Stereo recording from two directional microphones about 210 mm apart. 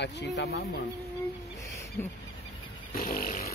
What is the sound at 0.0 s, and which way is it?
Speech, 55° left (ahead or behind).